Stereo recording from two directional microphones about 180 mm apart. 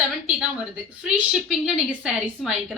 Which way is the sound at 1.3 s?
Centre (ahead or behind).